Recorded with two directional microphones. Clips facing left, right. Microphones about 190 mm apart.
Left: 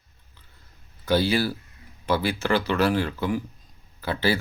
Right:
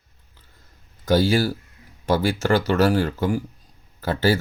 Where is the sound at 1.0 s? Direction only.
45° right (ahead or behind).